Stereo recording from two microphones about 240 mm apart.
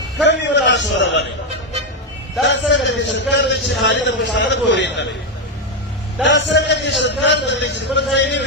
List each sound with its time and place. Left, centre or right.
0.3 s a sound: left
2.5 s a man's voice: left
6.2 s a man's voice: left